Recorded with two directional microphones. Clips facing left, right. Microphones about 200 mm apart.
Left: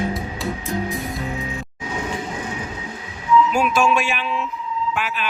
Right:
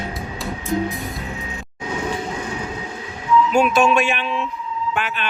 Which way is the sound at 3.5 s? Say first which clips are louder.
Right 3 dB; centre (ahead or behind).